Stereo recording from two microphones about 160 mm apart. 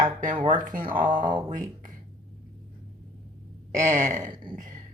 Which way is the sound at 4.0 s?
50° right (ahead or behind).